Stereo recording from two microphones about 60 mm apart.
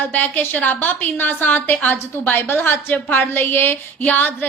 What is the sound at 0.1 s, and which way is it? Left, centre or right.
A woman's voice, left.